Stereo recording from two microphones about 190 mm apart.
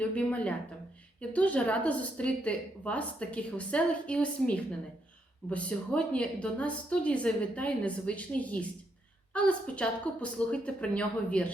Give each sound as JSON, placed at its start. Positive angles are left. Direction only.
{"t": 0.0, "sound": "a woman's voice", "side_deg": 5}